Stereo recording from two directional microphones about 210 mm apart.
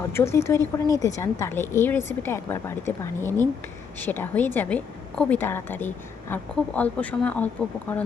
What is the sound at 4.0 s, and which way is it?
A woman's voice, 10° left (ahead or behind).